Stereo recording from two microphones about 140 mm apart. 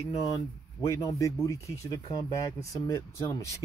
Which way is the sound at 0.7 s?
20° left (ahead or behind).